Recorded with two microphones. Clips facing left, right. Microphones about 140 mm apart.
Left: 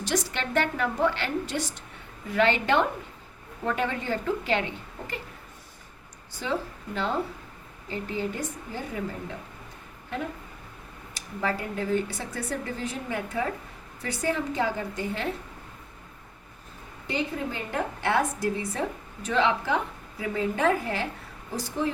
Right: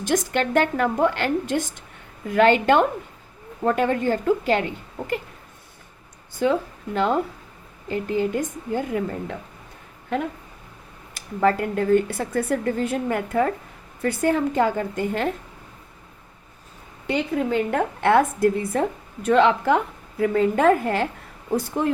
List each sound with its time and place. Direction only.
0.0 s a woman's voice: 50° right (ahead or behind)
6.3 s a woman's voice: 50° right (ahead or behind)
11.1 s a woman's voice: 55° right (ahead or behind)
17.1 s a woman's voice: 60° right (ahead or behind)